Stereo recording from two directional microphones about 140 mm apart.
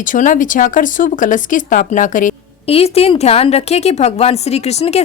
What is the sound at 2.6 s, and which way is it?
A woman's voice, 45° left (ahead or behind).